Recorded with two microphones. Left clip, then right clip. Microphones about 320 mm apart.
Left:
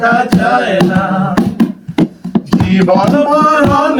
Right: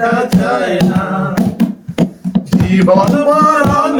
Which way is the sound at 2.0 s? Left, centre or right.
Centre.